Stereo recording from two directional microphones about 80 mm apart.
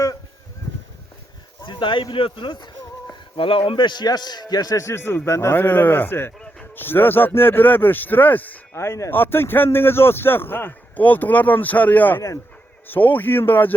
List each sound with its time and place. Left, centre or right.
1.6 s a man's voice: left
8.7 s speech: left